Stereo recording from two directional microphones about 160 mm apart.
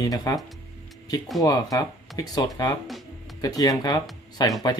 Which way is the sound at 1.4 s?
20° left (ahead or behind).